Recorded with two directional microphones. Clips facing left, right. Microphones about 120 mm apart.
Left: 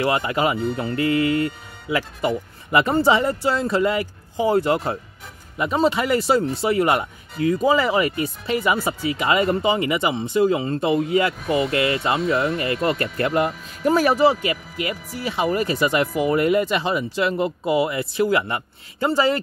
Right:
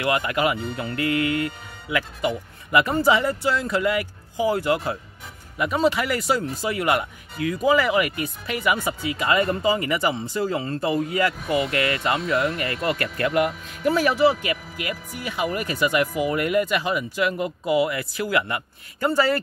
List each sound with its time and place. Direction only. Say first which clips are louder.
0.0 s speech: left 2 dB; 30° left (ahead or behind)